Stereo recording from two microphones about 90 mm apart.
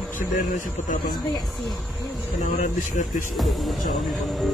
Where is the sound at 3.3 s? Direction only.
Centre (ahead or behind).